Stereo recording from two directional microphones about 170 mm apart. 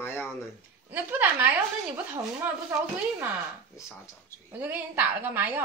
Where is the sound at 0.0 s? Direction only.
15° left (ahead or behind).